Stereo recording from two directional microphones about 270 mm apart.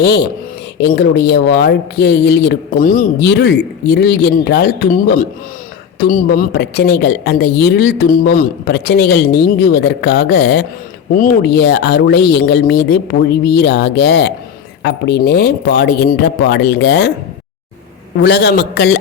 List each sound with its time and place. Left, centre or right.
0.0 s a woman's voice: left
18.2 s a woman's voice: left